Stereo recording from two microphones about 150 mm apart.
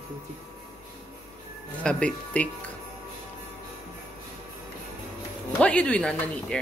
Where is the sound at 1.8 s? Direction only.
5° left (ahead or behind).